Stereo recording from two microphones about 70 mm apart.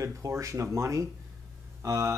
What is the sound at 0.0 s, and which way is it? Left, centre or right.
Speech, right.